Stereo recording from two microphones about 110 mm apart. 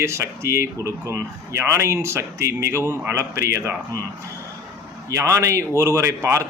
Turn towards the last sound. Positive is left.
turn(degrees=-25)  # may be behind; listen again after turning